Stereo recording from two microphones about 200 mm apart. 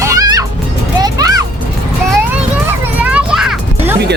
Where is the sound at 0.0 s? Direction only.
15° right (ahead or behind).